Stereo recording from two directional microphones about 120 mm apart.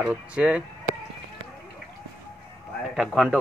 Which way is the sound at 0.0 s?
10° right (ahead or behind).